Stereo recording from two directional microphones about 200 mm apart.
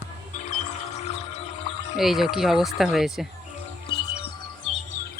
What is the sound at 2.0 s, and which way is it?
Speech, centre (ahead or behind).